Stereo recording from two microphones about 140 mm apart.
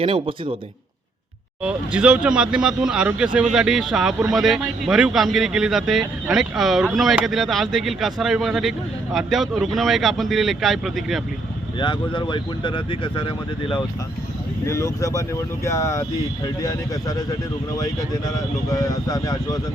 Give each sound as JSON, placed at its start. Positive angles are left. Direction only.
{"t": 0.0, "sound": "a man's voice", "side_deg": -40}
{"t": 1.6, "sound": "speech", "side_deg": -10}
{"t": 11.8, "sound": "speech", "side_deg": 35}
{"t": 14.7, "sound": "speech", "side_deg": 20}
{"t": 18.7, "sound": "speech", "side_deg": 25}